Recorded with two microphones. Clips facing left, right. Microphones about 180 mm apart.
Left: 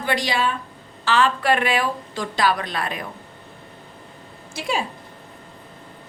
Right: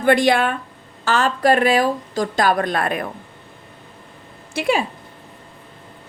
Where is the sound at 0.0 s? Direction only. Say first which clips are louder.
Right 7 dB; 55° right (ahead or behind).